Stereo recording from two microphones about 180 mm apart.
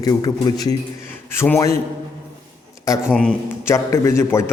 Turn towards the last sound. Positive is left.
turn(degrees=15)  # may be behind; listen again after turning